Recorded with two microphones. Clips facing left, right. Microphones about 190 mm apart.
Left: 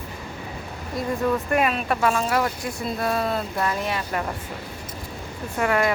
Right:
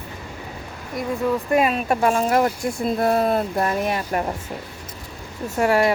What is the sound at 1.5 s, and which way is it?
Speech, 30° right (ahead or behind).